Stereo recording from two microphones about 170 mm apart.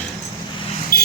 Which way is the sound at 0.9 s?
60° left (ahead or behind).